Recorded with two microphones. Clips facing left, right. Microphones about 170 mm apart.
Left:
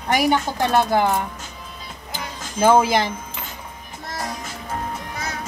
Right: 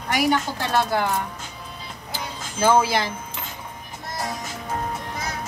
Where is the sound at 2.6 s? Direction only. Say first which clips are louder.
Left 3 dB; 15° left (ahead or behind).